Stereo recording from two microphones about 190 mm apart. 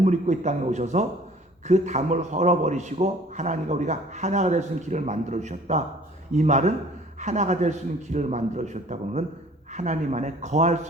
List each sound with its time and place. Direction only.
0.0 s a man's voice: 40° right (ahead or behind)